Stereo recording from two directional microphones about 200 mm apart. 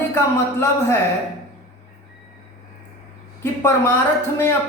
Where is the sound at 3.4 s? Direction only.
10° left (ahead or behind).